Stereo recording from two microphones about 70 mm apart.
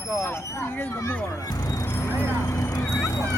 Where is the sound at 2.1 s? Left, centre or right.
Left.